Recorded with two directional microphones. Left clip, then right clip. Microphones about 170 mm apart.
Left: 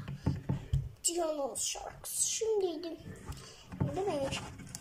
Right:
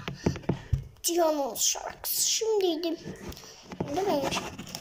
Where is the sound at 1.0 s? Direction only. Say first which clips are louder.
Right 8 dB; 10° left (ahead or behind).